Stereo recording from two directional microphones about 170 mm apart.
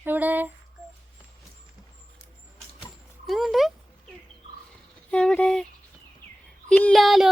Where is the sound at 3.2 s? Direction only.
Centre (ahead or behind).